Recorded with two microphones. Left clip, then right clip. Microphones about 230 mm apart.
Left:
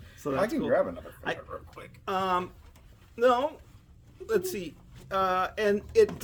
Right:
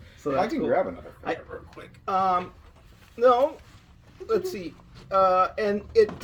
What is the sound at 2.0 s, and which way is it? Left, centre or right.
Speech, left.